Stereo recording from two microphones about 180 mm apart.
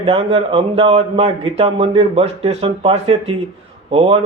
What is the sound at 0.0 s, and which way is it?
Speech, 35° right (ahead or behind).